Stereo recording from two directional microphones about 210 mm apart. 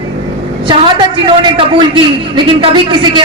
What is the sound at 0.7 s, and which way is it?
A man's voice, 20° right (ahead or behind).